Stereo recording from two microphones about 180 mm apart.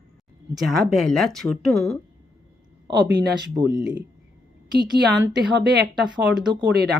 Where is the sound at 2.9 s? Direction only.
70° right (ahead or behind).